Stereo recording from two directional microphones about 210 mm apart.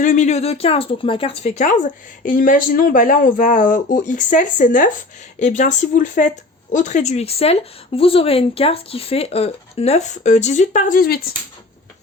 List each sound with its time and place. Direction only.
0.0 s speech: 35° left (ahead or behind)